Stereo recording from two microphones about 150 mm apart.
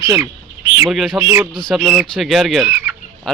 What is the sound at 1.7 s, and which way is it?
Speech, 5° right (ahead or behind).